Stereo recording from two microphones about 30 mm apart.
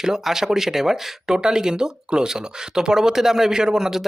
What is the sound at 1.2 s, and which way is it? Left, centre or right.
Speech, right.